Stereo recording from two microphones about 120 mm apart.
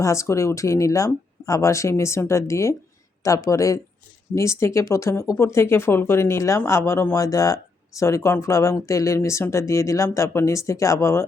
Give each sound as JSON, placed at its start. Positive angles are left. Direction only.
{"t": 0.0, "sound": "speech", "side_deg": 25}